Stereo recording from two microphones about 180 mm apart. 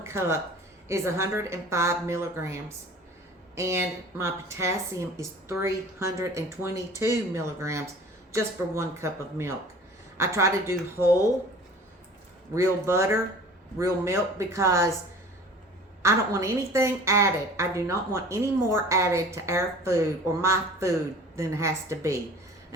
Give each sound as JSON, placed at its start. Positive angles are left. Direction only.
{"t": 0.0, "sound": "speech", "side_deg": -15}
{"t": 12.5, "sound": "speech", "side_deg": -15}
{"t": 16.0, "sound": "speech", "side_deg": -15}